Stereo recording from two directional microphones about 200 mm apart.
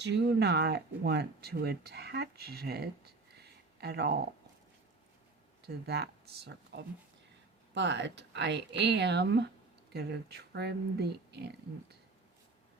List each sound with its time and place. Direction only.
0.0 s speech: 60° right (ahead or behind)
5.6 s speech: 55° right (ahead or behind)